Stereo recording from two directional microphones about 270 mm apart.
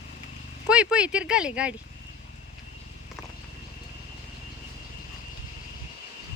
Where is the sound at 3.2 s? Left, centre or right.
Centre.